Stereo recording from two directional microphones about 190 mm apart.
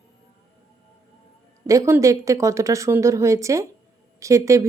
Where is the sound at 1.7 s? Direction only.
15° right (ahead or behind).